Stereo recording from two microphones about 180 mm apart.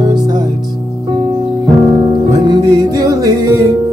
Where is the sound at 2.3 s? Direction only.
20° right (ahead or behind).